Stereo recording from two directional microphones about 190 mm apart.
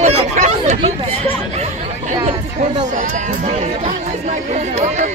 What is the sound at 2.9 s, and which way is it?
Speech, 40° right (ahead or behind).